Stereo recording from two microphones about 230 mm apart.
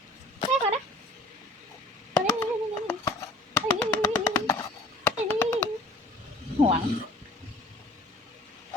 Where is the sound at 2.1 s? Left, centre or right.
Centre.